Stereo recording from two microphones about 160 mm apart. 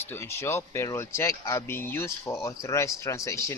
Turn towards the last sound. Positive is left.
turn(degrees=20)  # may be behind; listen again after turning